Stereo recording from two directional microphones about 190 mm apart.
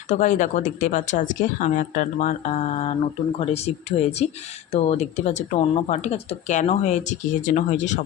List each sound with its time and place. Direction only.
0.1 s speech: 40° left (ahead or behind)